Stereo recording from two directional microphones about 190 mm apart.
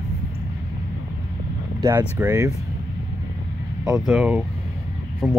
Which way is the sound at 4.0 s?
5° right (ahead or behind).